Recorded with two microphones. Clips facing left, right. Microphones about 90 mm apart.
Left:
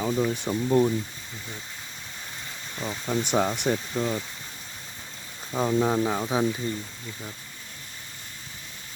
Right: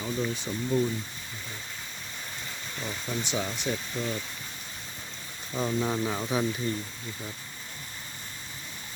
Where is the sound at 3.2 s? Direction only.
55° left (ahead or behind).